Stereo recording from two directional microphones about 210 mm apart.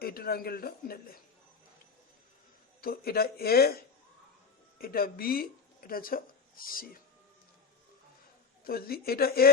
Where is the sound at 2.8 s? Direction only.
45° left (ahead or behind).